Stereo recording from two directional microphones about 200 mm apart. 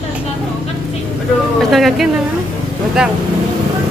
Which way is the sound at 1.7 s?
Centre (ahead or behind).